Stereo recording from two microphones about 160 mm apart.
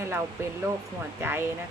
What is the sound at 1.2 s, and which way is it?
Speech, 15° right (ahead or behind).